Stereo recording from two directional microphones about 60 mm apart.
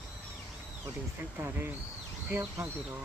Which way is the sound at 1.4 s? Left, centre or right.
Right.